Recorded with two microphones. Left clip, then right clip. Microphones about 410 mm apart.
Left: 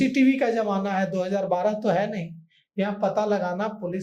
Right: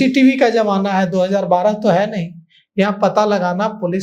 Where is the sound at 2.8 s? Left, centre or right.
Right.